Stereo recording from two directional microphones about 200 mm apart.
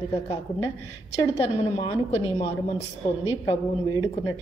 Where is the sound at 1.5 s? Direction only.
30° left (ahead or behind).